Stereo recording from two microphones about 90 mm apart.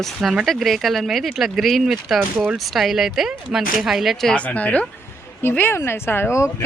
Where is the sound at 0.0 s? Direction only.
Centre (ahead or behind).